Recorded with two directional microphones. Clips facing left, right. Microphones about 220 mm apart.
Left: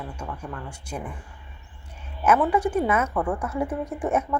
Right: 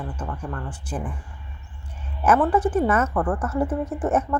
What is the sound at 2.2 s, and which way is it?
A woman's voice, 10° left (ahead or behind).